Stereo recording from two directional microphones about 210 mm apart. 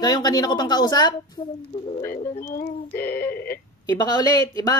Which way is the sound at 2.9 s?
10° left (ahead or behind).